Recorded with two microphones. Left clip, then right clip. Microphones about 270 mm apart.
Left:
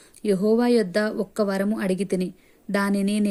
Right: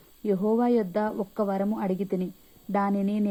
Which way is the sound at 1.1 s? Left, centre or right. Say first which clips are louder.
Left 4 dB; left.